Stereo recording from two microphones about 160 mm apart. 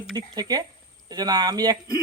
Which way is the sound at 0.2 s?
25° right (ahead or behind).